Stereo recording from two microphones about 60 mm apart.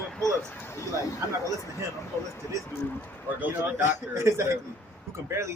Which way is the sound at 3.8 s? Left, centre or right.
Right.